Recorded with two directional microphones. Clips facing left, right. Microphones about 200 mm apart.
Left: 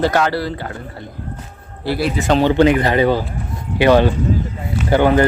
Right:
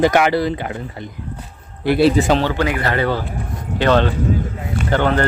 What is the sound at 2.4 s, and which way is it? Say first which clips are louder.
Speech: left 7 dB; 25° left (ahead or behind).